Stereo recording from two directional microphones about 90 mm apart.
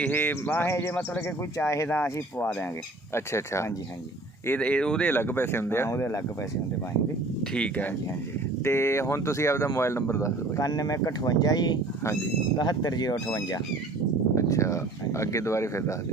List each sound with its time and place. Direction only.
0.0 s bird: 20° left (ahead or behind)
1.5 s speech: 35° left (ahead or behind)
4.4 s speech: 15° left (ahead or behind)
5.1 s bird: 25° left (ahead or behind)
7.4 s speech: 10° left (ahead or behind)
8.6 s speech: 30° left (ahead or behind)